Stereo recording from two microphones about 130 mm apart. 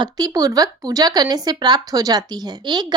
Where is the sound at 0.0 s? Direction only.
30° right (ahead or behind).